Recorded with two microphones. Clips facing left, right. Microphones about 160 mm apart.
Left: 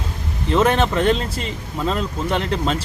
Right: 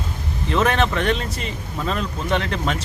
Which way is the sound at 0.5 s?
30° left (ahead or behind).